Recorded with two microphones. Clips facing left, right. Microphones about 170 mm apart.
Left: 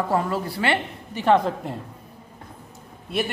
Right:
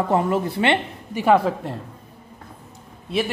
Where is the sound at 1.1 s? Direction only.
10° right (ahead or behind).